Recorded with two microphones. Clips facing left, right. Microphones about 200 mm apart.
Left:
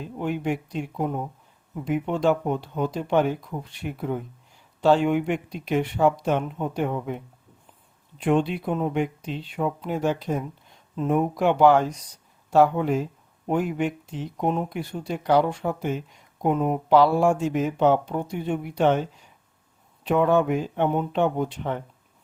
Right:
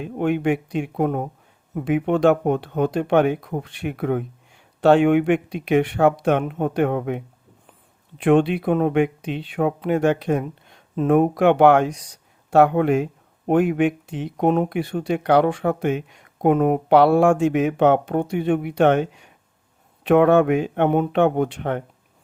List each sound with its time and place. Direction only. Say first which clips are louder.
0.0 s speech: right 6 dB; 65° right (ahead or behind)
8.2 s speech: right 6 dB; 70° right (ahead or behind)